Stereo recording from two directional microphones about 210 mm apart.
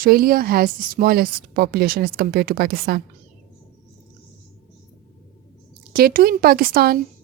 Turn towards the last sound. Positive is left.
turn(degrees=-45)  # may be behind; listen again after turning